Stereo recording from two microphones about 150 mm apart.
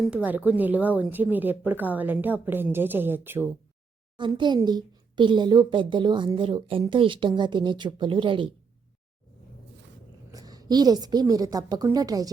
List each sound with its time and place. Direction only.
0.1 s a woman's voice: 10° right (ahead or behind)
4.2 s speech: 30° right (ahead or behind)
10.3 s a woman's voice: 25° right (ahead or behind)